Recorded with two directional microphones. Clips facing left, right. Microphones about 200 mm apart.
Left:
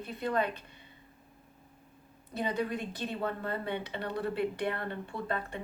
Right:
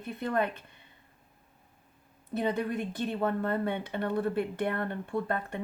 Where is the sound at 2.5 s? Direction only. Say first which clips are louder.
Right 2 dB; 50° right (ahead or behind).